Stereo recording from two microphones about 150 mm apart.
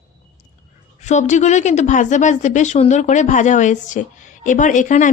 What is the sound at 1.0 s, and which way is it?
A woman's voice, 50° left (ahead or behind).